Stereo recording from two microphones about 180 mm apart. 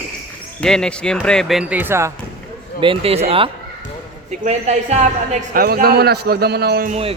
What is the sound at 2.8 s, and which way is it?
Speech, 30° right (ahead or behind).